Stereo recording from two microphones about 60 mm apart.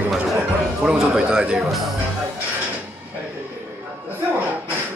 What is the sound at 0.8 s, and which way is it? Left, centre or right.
Speech, centre.